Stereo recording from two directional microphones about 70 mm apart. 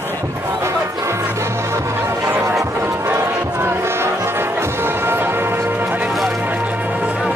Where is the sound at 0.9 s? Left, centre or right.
Right.